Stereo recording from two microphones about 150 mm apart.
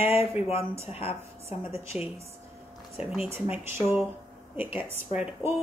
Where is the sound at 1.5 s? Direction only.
15° right (ahead or behind).